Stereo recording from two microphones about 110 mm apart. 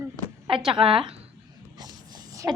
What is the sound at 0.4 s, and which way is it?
Speech, 55° right (ahead or behind).